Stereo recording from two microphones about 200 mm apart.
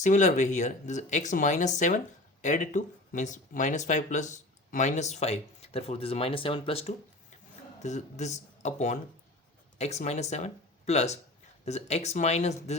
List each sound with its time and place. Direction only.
0.0 s speech: 35° left (ahead or behind)